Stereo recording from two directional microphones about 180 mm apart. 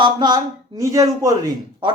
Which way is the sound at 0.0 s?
25° right (ahead or behind).